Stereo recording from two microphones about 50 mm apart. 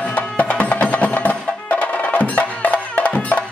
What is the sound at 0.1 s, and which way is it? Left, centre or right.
Music, left.